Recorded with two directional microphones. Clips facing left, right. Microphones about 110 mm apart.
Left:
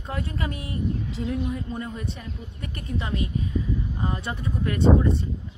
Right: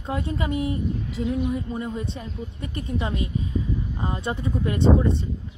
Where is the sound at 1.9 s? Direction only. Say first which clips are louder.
Right 3 dB; 25° right (ahead or behind).